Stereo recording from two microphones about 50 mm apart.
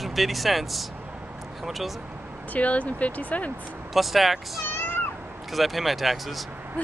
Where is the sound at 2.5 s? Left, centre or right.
Left.